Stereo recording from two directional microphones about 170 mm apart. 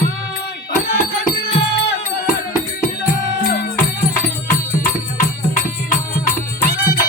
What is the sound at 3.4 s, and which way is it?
Music, 50° left (ahead or behind).